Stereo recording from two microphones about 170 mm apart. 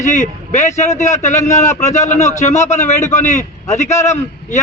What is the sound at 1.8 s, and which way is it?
A man's voice, 45° left (ahead or behind).